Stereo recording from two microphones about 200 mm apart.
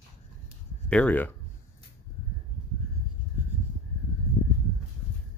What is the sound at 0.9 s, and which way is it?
Speech, 5° left (ahead or behind).